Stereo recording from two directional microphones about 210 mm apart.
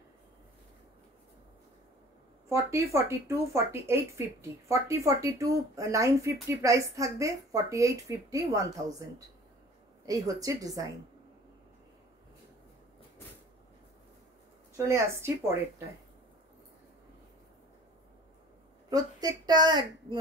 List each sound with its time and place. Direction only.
2.5 s speech: 15° right (ahead or behind)
10.0 s speech: 15° right (ahead or behind)
14.8 s speech: 10° right (ahead or behind)
18.9 s a woman's voice: 15° right (ahead or behind)